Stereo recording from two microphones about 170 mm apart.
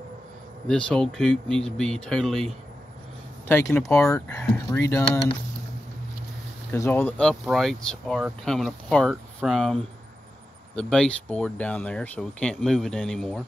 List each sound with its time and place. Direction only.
0.7 s speech: 5° left (ahead or behind)
6.7 s speech: 15° left (ahead or behind)